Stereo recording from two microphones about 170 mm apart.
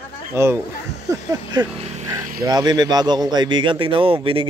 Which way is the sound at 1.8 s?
40° right (ahead or behind).